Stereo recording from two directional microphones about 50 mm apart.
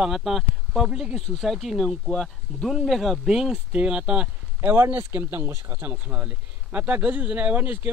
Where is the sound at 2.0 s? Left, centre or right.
Centre.